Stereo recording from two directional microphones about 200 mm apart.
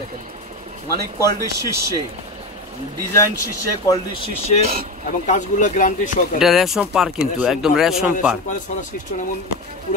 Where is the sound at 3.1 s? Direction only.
15° left (ahead or behind).